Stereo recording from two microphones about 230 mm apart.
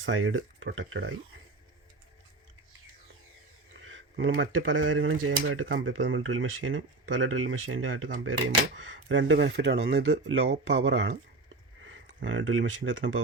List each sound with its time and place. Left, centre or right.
0.0 s speech: right
4.2 s speech: right
11.4 s a sound: right